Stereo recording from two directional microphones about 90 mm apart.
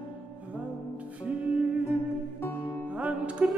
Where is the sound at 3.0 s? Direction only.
15° right (ahead or behind).